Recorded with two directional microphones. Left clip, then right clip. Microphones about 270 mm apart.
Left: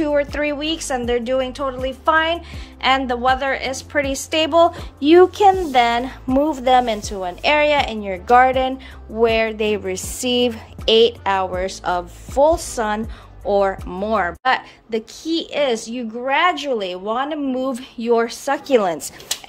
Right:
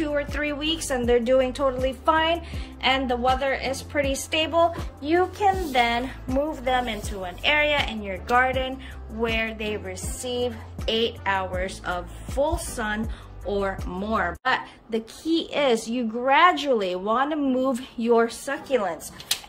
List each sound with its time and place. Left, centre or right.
0.0 s a woman's voice: centre
5.0 s a woman's voice: left
5.7 s a woman's voice: centre
18.7 s a woman's voice: left